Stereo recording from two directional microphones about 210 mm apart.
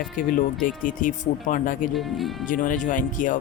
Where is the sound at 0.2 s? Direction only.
40° left (ahead or behind).